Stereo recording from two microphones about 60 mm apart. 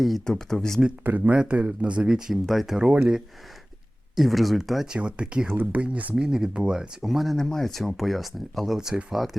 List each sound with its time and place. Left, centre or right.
0.0 s speech: centre
1.0 s speech: right; by 2.9 s centre
4.1 s speech: centre
4.9 s speech: centre
5.5 s speech: right
6.1 s speech: centre